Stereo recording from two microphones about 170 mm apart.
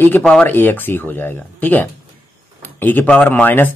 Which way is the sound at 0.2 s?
5° left (ahead or behind).